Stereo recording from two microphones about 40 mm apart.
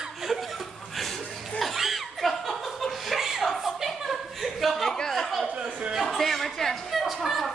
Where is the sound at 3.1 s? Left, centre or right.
Centre.